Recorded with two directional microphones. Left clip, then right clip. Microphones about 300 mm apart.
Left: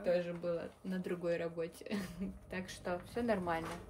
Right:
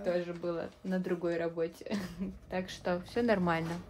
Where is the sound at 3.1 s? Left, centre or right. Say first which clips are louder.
Right 6 dB; right.